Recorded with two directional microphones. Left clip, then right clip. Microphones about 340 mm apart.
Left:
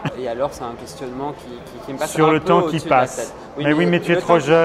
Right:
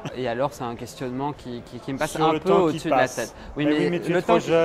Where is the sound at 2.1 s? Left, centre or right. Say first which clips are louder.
Left 5 dB; left.